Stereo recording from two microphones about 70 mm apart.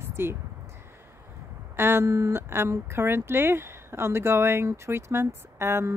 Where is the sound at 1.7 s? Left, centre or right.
Right.